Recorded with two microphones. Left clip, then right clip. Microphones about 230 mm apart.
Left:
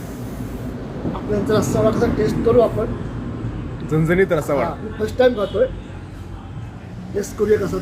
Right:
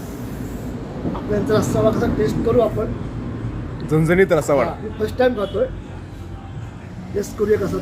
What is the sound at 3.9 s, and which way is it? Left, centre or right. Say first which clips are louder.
Speech: right 2 dB; centre.